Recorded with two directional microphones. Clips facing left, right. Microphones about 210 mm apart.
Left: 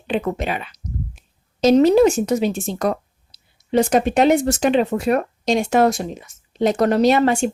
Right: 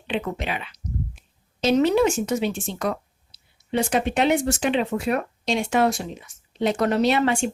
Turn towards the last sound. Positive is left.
turn(degrees=40)  # may be behind; listen again after turning